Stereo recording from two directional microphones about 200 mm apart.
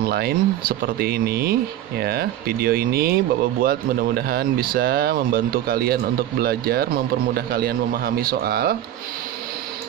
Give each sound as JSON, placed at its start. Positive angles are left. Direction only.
{"t": 0.0, "sound": "speech", "side_deg": -50}